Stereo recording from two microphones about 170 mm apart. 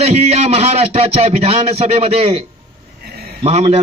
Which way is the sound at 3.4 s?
40° right (ahead or behind).